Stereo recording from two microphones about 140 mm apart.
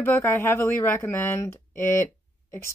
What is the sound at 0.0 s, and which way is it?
Speech, 15° left (ahead or behind).